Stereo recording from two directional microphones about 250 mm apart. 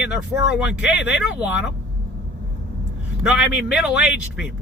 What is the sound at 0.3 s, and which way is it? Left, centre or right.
Speech, left.